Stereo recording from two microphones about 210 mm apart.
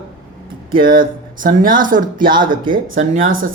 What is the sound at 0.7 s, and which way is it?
Speech, 45° right (ahead or behind).